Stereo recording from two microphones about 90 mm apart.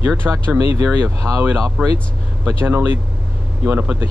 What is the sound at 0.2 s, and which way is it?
Speech, 15° right (ahead or behind).